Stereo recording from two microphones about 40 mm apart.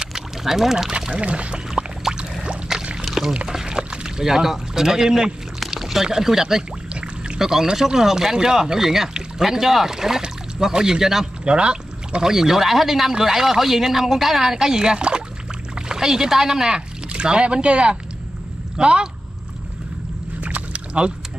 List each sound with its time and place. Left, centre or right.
0.4 s speech: centre
1.1 s speech: right
2.1 s a sound: centre
2.8 s boat: right
3.4 s speech: centre
5.6 s rowboat: centre
6.0 s speech: centre
6.9 s pour: right
7.3 s speech: centre
11.4 s speech: right
20.3 s rowboat: right